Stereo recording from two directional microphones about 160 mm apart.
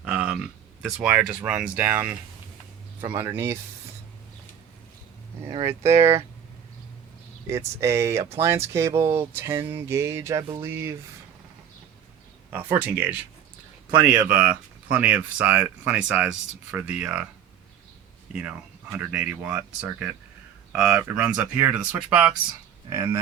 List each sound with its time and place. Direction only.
0.0 s a sound: 5° right (ahead or behind)
0.8 s speech: 5° right (ahead or behind)
3.2 s speech: 15° right (ahead or behind)
5.5 s speech: 30° right (ahead or behind)
6.0 s speech: 20° right (ahead or behind)
7.4 s speech: 15° right (ahead or behind)
12.5 s speech: 15° right (ahead or behind)
18.9 s speech: 10° right (ahead or behind)